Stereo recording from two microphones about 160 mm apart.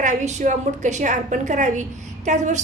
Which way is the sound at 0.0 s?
50° right (ahead or behind).